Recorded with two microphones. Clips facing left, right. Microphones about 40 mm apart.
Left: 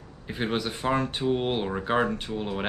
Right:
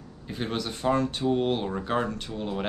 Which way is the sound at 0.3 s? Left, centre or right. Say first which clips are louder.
Left 2 dB; left.